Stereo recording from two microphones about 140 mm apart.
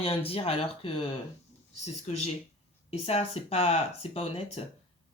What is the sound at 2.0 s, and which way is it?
Speech, 50° left (ahead or behind).